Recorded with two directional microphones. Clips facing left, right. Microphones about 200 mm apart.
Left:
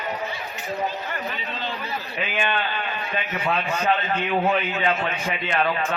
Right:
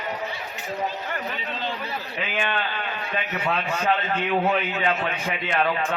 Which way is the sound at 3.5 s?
Centre (ahead or behind).